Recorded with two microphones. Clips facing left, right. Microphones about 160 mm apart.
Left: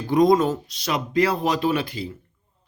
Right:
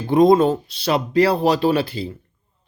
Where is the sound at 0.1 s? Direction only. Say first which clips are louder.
Right 4 dB; 25° right (ahead or behind).